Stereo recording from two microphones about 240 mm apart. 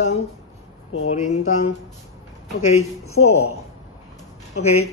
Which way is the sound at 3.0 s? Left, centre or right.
Left.